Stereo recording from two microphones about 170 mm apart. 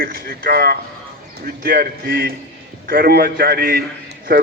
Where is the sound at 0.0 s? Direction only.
60° right (ahead or behind).